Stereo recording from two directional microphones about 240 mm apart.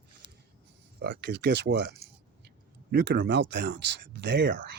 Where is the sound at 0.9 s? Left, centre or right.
Right.